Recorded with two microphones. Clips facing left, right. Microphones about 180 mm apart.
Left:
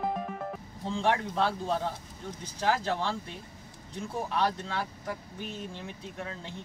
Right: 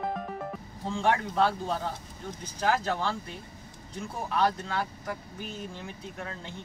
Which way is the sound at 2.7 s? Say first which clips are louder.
Right 1 dB; 30° left (ahead or behind).